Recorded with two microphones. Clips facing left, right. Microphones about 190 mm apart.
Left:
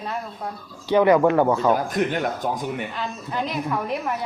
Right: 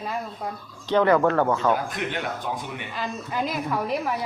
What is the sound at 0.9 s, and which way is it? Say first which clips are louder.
Speech: left 3 dB; 10° left (ahead or behind).